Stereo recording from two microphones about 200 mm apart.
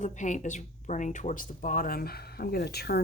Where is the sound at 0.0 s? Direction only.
40° left (ahead or behind).